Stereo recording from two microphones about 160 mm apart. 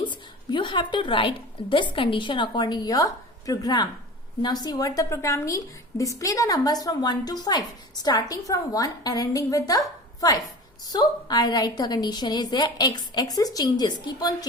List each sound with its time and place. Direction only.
0.0 s a woman's voice: 30° left (ahead or behind)
10.8 s a woman's voice: 25° left (ahead or behind)